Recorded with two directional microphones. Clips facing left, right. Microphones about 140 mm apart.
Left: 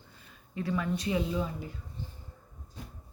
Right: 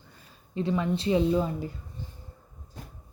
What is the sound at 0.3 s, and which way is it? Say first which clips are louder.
Speech: right 5 dB; 25° right (ahead or behind).